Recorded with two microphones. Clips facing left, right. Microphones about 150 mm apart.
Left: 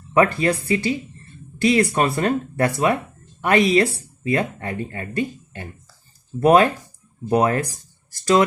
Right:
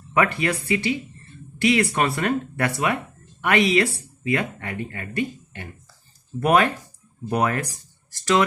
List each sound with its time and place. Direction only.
0.1 s speech: 35° left (ahead or behind)